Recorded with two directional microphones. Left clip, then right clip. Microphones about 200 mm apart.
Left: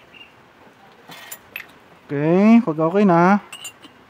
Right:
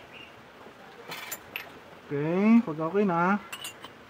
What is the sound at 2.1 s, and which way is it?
Speech, 55° left (ahead or behind).